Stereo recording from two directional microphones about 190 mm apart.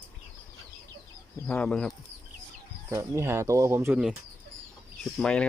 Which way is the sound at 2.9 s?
15° right (ahead or behind).